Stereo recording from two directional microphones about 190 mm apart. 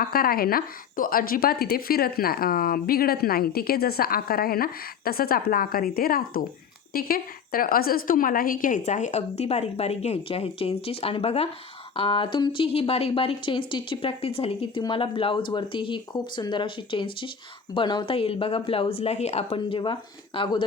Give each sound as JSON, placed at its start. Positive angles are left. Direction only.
{"t": 0.0, "sound": "a woman's voice", "side_deg": 50}